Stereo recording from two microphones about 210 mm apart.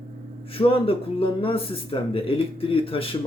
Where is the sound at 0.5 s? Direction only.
25° left (ahead or behind).